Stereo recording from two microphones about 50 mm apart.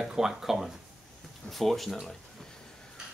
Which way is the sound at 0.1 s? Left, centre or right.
Centre.